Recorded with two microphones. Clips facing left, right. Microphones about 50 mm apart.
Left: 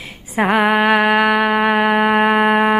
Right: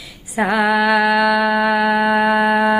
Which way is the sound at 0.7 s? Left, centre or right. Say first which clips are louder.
Left 1 dB; left.